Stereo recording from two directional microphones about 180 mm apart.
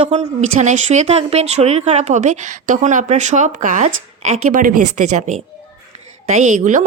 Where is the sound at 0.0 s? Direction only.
40° right (ahead or behind).